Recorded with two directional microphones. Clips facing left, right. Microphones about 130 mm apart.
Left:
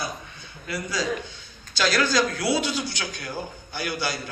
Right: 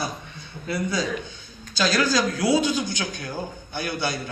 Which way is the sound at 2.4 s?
15° right (ahead or behind).